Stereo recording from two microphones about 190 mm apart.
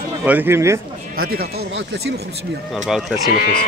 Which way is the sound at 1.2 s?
55° right (ahead or behind).